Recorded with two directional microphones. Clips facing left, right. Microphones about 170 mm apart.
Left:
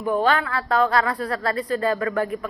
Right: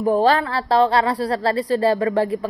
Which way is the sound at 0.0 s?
35° right (ahead or behind).